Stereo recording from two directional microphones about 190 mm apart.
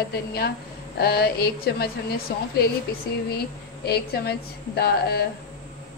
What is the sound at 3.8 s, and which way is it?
A woman's voice, 55° left (ahead or behind).